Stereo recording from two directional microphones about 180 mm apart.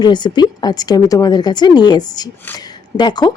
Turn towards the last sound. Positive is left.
turn(degrees=25)  # may be behind; listen again after turning